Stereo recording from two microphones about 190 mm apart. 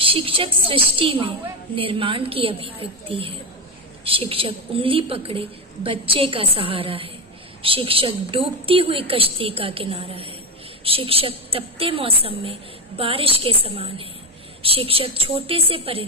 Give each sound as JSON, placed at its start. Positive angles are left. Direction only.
{"t": 0.0, "sound": "a woman's voice", "side_deg": -30}